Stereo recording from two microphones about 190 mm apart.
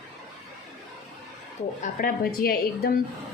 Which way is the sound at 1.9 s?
50° left (ahead or behind).